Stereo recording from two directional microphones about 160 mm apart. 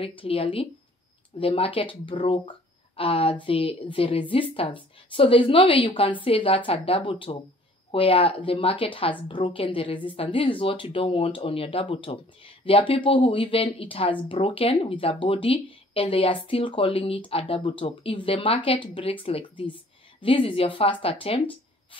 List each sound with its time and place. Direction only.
0.0 s a woman's voice: 35° left (ahead or behind)